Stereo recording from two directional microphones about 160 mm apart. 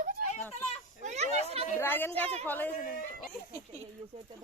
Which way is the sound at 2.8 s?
55° left (ahead or behind).